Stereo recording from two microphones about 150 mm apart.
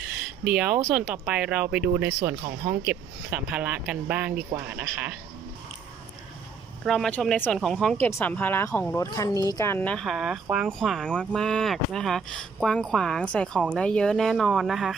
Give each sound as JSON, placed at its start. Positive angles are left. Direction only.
{"t": 0.4, "sound": "speech", "side_deg": -10}
{"t": 6.8, "sound": "speech", "side_deg": 5}
{"t": 7.9, "sound": "speech", "side_deg": 15}
{"t": 9.0, "sound": "speech", "side_deg": 25}
{"t": 9.6, "sound": "speech", "side_deg": 15}